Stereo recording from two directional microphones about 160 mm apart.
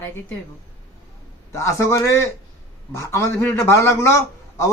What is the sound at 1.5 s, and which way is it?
A woman's voice, 20° left (ahead or behind).